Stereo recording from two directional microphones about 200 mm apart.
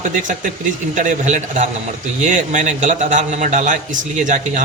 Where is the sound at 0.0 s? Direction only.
40° right (ahead or behind).